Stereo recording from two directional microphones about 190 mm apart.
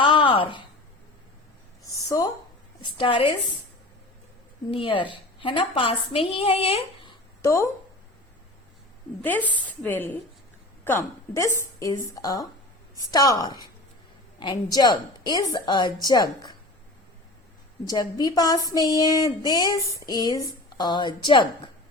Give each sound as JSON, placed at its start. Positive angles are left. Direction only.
{"t": 0.0, "sound": "a sound", "side_deg": 25}
{"t": 1.9, "sound": "a sound", "side_deg": 20}
{"t": 3.0, "sound": "speech", "side_deg": 25}
{"t": 4.7, "sound": "speech", "side_deg": 30}
{"t": 7.4, "sound": "speech", "side_deg": 15}
{"t": 9.2, "sound": "a woman's voice", "side_deg": 10}
{"t": 17.8, "sound": "speech", "side_deg": 20}